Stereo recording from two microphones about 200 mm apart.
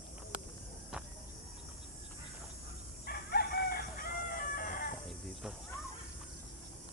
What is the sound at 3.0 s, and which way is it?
Chicken, 50° left (ahead or behind).